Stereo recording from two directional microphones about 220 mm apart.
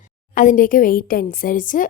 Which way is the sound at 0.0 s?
35° left (ahead or behind).